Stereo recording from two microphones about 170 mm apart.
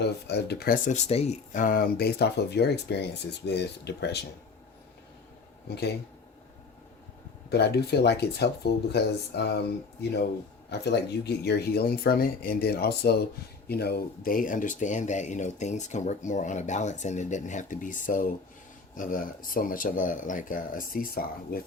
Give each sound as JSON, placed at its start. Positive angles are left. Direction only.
{"t": 0.0, "sound": "speech", "side_deg": 75}
{"t": 0.9, "sound": "speech", "side_deg": 40}
{"t": 5.6, "sound": "speech", "side_deg": 75}
{"t": 7.5, "sound": "speech", "side_deg": 75}
{"t": 10.7, "sound": "speech", "side_deg": 80}